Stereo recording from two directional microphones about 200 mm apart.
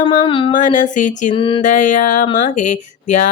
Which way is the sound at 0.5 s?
40° left (ahead or behind).